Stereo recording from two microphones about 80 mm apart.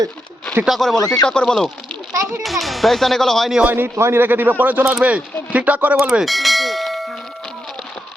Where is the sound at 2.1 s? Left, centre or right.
Right.